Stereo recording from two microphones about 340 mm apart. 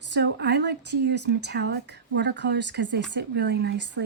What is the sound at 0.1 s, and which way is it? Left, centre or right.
Speech, right.